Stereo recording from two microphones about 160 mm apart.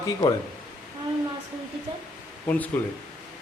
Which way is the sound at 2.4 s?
10° left (ahead or behind).